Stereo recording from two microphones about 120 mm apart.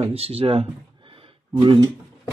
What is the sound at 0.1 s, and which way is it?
Speech, 55° right (ahead or behind).